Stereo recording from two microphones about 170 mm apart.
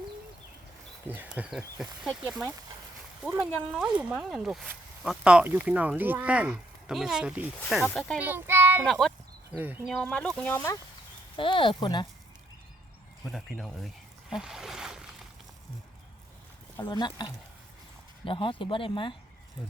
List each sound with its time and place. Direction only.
1.0 s speech: 10° right (ahead or behind)
8.2 s child singing: 10° right (ahead or behind)
8.9 s speech: centre (ahead or behind)
9.6 s speech: 10° right (ahead or behind)
9.9 s speech: 5° left (ahead or behind)
11.3 s speech: 30° left (ahead or behind)
13.2 s speech: centre (ahead or behind)
16.7 s speech: 25° left (ahead or behind)